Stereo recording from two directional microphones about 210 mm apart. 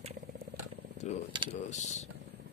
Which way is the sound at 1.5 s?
35° left (ahead or behind).